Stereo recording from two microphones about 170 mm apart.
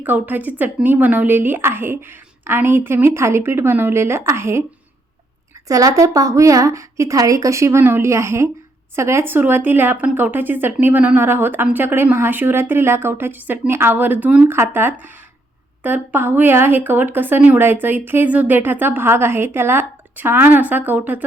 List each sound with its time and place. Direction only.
0.0 s speech: 10° right (ahead or behind)
5.6 s a woman's voice: 20° right (ahead or behind)